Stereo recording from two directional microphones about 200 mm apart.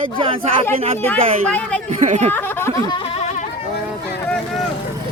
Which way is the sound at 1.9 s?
35° right (ahead or behind).